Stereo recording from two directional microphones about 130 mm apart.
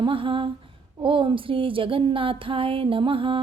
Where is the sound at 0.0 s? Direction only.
45° right (ahead or behind).